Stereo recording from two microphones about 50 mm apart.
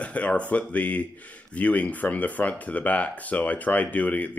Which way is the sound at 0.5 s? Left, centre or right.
Left.